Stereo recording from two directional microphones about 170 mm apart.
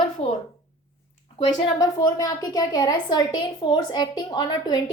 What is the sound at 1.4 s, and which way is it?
A woman's voice, 20° left (ahead or behind).